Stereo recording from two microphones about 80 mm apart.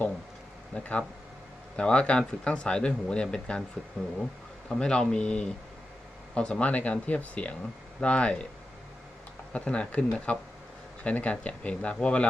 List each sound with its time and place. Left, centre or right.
0.7 s speech: centre
4.7 s speech: centre
9.5 s speech: centre